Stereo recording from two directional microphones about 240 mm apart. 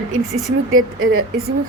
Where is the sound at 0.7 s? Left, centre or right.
Right.